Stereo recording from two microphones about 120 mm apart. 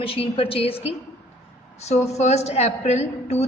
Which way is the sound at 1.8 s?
65° left (ahead or behind).